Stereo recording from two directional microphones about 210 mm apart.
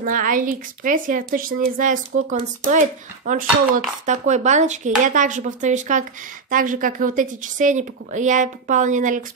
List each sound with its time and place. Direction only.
0.0 s a woman's voice: 40° right (ahead or behind)